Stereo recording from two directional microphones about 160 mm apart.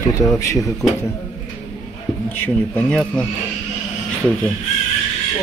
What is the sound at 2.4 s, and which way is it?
Speech, 10° left (ahead or behind).